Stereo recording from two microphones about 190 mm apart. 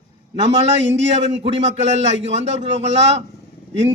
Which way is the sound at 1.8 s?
35° right (ahead or behind).